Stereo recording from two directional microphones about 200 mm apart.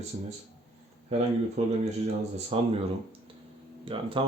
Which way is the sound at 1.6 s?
35° right (ahead or behind).